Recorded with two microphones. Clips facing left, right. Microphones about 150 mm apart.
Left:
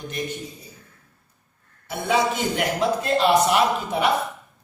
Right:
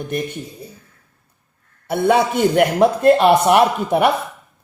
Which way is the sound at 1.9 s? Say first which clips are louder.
Right 6 dB; 60° right (ahead or behind).